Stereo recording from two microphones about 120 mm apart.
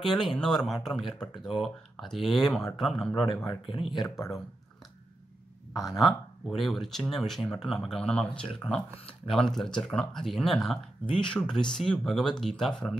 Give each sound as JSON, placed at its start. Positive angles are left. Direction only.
{"t": 0.0, "sound": "speech", "side_deg": 0}
{"t": 3.4, "sound": "speech", "side_deg": 45}
{"t": 5.9, "sound": "speech", "side_deg": 0}